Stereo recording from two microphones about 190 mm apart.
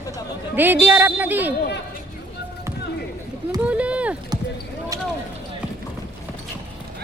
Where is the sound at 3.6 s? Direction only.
5° right (ahead or behind).